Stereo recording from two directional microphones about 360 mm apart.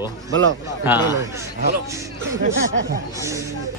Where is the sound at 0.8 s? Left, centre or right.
Centre.